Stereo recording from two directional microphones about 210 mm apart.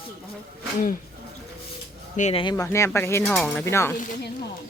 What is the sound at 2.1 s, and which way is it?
Speech, 35° left (ahead or behind).